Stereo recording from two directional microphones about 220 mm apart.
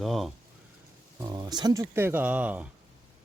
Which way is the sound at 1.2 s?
20° right (ahead or behind).